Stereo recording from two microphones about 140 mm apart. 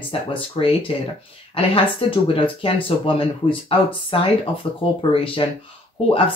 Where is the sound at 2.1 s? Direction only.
40° left (ahead or behind).